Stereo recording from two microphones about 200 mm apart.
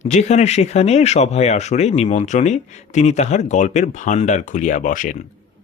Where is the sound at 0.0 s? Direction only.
35° left (ahead or behind).